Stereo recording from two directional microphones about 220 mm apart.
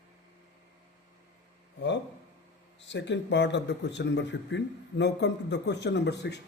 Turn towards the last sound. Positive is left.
turn(degrees=50)  # may be behind; listen again after turning